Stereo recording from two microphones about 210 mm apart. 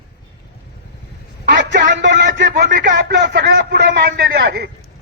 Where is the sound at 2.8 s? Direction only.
45° right (ahead or behind).